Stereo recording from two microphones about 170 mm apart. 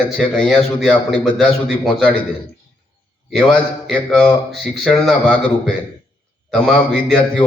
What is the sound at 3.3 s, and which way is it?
Speech, centre (ahead or behind).